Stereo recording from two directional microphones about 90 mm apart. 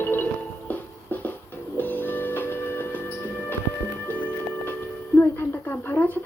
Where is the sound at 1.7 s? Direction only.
20° left (ahead or behind).